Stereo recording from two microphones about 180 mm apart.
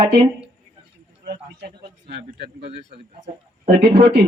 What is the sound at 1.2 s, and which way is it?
Speech, 65° right (ahead or behind).